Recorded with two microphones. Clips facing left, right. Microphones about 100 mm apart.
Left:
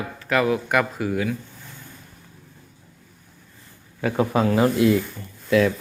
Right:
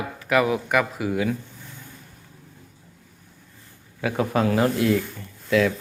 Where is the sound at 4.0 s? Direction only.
Centre (ahead or behind).